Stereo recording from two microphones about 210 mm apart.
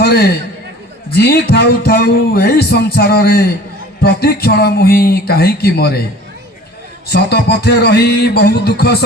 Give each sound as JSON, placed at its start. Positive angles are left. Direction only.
{"t": 0.0, "sound": "a sound", "side_deg": 50}
{"t": 1.1, "sound": "music", "side_deg": 50}
{"t": 7.1, "sound": "music", "side_deg": 50}